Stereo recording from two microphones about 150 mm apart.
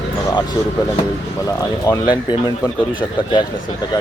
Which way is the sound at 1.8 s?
25° left (ahead or behind).